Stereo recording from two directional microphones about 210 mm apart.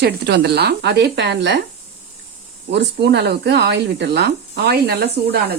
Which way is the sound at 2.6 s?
55° right (ahead or behind).